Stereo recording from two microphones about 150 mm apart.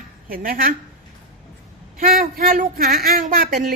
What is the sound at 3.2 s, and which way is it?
Speech, 60° right (ahead or behind).